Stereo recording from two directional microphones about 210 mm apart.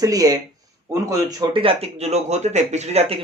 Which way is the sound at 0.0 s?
15° right (ahead or behind).